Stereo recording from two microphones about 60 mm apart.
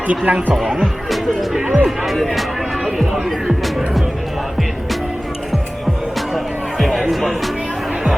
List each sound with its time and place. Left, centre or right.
0.3 s speech: right
1.6 s speech: right
2.0 s speech: centre
6.1 s music: centre